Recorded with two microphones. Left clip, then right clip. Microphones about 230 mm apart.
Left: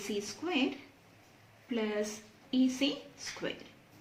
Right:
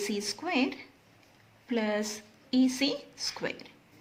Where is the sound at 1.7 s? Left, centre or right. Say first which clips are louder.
Right 4 dB; right.